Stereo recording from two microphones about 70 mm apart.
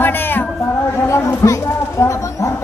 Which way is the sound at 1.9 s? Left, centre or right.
Left.